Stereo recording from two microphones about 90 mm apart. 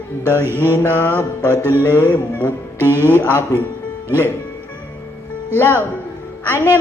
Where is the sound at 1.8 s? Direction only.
20° left (ahead or behind).